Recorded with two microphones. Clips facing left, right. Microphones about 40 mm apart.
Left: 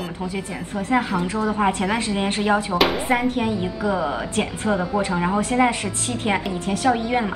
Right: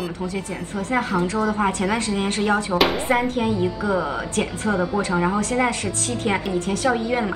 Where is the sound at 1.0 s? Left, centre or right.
Centre.